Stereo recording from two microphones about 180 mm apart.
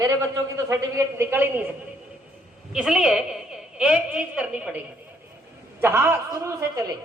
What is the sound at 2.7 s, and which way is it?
A woman's voice, 5° right (ahead or behind).